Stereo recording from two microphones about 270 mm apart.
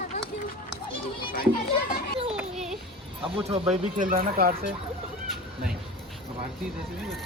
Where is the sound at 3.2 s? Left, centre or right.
Centre.